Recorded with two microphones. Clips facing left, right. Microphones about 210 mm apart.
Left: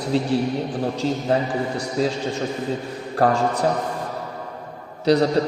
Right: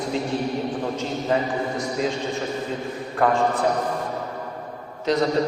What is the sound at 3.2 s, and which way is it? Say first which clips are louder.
Speech: left 2 dB; 35° left (ahead or behind).